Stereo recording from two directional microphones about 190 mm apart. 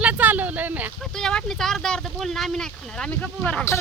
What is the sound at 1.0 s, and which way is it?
Speech, centre (ahead or behind).